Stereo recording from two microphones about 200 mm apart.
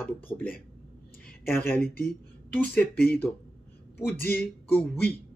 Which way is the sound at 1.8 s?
50° left (ahead or behind).